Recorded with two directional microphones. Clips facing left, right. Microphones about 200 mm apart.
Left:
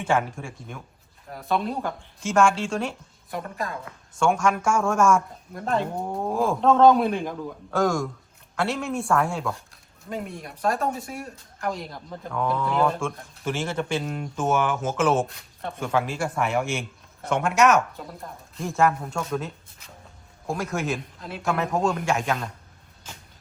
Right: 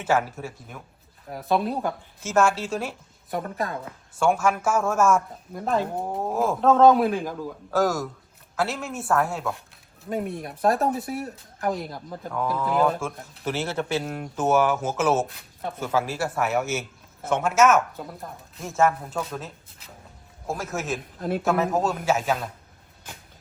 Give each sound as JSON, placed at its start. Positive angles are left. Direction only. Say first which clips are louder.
{"t": 0.0, "sound": "a man's voice", "louder": "right 1 dB", "side_deg": -5}
{"t": 20.5, "sound": "a man's voice", "louder": "left 2 dB", "side_deg": 0}
{"t": 21.2, "sound": "speech", "louder": "right 10 dB", "side_deg": -50}
{"t": 21.4, "sound": "a man's voice", "louder": "even", "side_deg": 0}